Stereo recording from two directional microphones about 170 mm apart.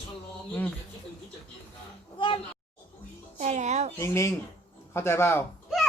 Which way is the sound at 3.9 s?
15° left (ahead or behind).